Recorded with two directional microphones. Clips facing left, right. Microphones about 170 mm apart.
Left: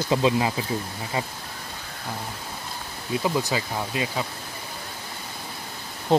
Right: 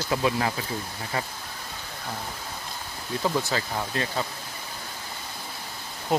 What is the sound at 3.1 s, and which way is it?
Speech, 10° left (ahead or behind).